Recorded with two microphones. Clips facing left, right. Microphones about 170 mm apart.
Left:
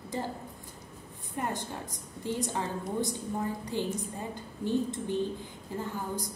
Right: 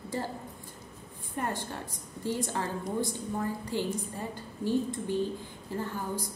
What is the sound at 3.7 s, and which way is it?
A woman's voice, 20° left (ahead or behind).